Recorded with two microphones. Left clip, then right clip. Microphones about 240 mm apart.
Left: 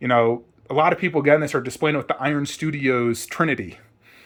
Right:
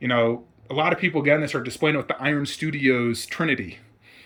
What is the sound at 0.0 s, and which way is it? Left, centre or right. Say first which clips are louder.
Speech: left 3 dB; centre.